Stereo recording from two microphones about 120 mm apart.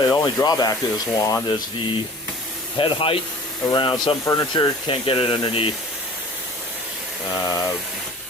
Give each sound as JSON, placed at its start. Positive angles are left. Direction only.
{"t": 0.1, "sound": "speech", "side_deg": 25}
{"t": 2.7, "sound": "speech", "side_deg": 45}
{"t": 7.3, "sound": "speech", "side_deg": 30}